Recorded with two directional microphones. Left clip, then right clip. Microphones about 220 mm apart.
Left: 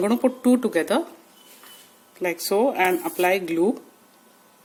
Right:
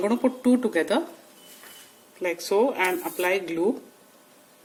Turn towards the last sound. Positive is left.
turn(degrees=35)  # may be behind; listen again after turning